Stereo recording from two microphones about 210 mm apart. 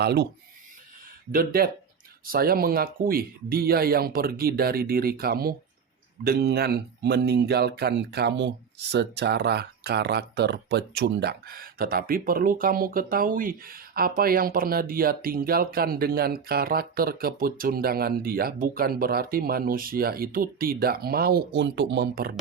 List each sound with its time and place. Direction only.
0.0 s speech: 50° right (ahead or behind)
1.3 s speech: 45° right (ahead or behind)